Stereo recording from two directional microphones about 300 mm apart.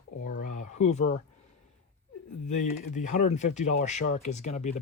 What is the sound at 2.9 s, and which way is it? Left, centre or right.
Speech, left.